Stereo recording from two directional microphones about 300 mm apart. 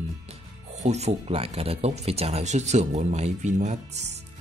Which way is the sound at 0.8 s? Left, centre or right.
Right.